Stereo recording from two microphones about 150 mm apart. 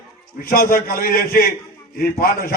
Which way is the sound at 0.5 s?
75° left (ahead or behind).